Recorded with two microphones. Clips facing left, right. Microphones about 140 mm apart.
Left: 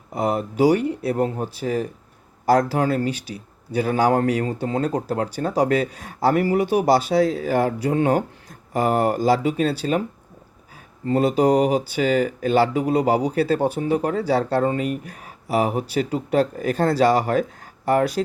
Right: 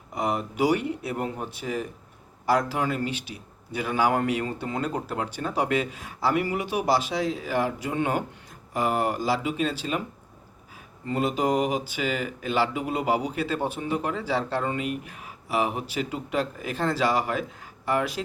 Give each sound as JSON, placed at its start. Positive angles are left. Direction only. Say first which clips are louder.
{"t": 0.1, "sound": "speech", "louder": "left 5 dB", "side_deg": 35}
{"t": 11.1, "sound": "speech", "louder": "left 7 dB", "side_deg": 40}